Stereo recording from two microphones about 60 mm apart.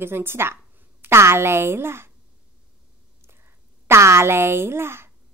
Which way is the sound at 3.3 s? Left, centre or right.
Right.